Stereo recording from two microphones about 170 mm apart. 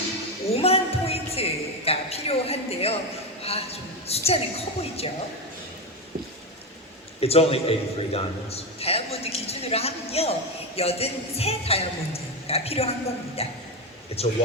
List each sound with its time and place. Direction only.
0.4 s a sound: 35° left (ahead or behind)
3.4 s a man's voice: 35° left (ahead or behind)
7.2 s a man's voice: 35° left (ahead or behind)